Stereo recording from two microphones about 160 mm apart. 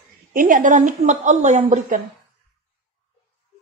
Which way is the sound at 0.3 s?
60° right (ahead or behind).